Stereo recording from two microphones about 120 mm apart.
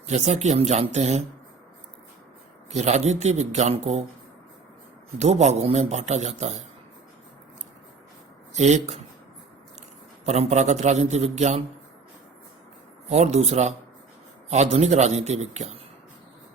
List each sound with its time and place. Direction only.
0.1 s speech: 70° right (ahead or behind)
2.6 s speech: 70° right (ahead or behind)
5.1 s speech: 65° right (ahead or behind)
8.5 s speech: 70° right (ahead or behind)
10.2 s speech: 70° right (ahead or behind)
13.1 s speech: 70° right (ahead or behind)